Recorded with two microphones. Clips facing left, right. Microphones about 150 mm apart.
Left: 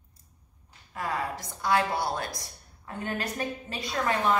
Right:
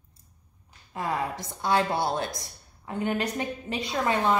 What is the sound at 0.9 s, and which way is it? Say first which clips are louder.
A woman's voice: right 2 dB; 25° right (ahead or behind).